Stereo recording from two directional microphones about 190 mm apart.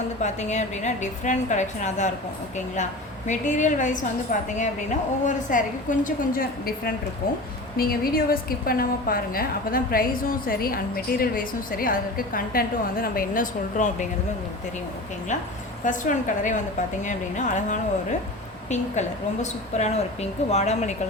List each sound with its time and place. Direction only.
0.2 s a woman's voice: 40° left (ahead or behind)
3.2 s a woman's voice: 40° left (ahead or behind)
15.8 s a woman's voice: 40° left (ahead or behind)